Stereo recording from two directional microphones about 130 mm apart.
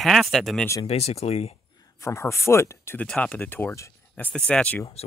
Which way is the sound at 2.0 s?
20° left (ahead or behind).